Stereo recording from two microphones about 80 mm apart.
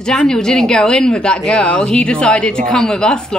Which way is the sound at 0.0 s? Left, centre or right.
Centre.